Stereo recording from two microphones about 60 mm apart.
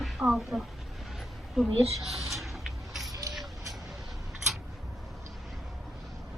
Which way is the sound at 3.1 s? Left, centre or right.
Right.